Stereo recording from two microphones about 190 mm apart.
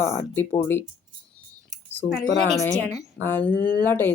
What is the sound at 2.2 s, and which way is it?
Speech, 70° left (ahead or behind).